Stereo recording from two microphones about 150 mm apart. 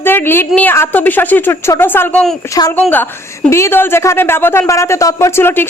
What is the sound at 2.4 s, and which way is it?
A woman's voice, 20° left (ahead or behind).